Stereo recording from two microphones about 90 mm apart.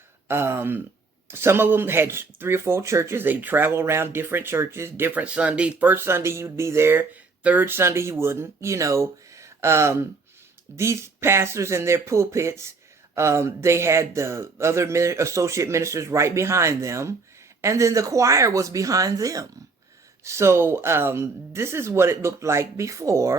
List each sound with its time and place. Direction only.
0.3 s speech: 25° right (ahead or behind)